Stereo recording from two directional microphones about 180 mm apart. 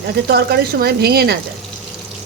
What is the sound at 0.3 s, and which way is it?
A woman's voice, 60° right (ahead or behind).